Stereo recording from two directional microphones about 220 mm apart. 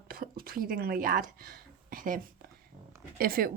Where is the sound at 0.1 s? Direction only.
40° right (ahead or behind).